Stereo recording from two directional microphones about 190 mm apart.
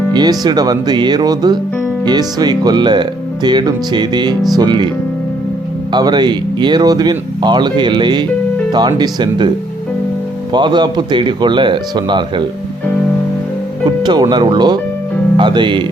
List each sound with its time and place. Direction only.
0.1 s speech: 20° right (ahead or behind)
5.9 s speech: 20° right (ahead or behind)
10.5 s speech: 25° right (ahead or behind)
13.8 s speech: 20° right (ahead or behind)